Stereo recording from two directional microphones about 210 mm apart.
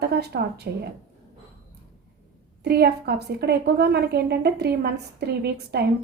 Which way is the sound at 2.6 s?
50° right (ahead or behind).